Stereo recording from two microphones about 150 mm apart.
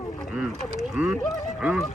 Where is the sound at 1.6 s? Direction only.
5° right (ahead or behind).